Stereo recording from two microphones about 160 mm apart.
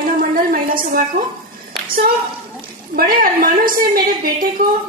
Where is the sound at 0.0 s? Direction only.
65° right (ahead or behind).